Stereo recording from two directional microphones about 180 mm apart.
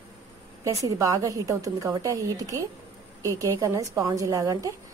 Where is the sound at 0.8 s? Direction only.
20° right (ahead or behind).